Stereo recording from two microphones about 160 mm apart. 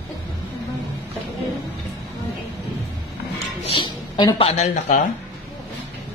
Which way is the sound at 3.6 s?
30° left (ahead or behind).